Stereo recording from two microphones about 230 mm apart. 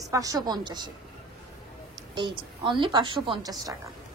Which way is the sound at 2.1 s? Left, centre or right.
Right.